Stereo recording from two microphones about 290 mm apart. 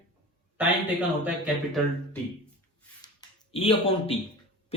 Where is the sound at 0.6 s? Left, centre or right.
Centre.